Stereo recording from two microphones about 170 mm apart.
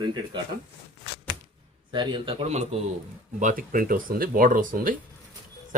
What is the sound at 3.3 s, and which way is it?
Speech, 50° right (ahead or behind).